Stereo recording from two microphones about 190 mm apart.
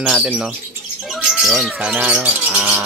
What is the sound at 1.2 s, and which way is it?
Bird, centre (ahead or behind).